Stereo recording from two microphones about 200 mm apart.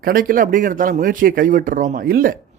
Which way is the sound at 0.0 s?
45° right (ahead or behind).